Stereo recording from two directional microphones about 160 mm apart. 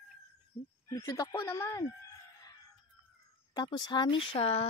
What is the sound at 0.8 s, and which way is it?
Speech, 20° left (ahead or behind).